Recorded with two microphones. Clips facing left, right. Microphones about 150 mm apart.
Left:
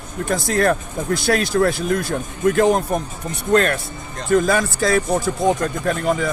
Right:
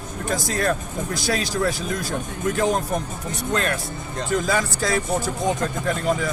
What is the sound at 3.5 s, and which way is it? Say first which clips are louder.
Speech: left 8 dB; 55° left (ahead or behind).